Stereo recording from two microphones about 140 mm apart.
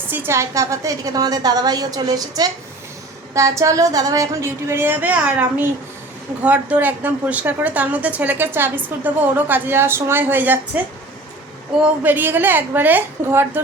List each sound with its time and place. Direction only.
0.1 s a woman's voice: 15° right (ahead or behind)
11.8 s a woman's voice: 15° right (ahead or behind)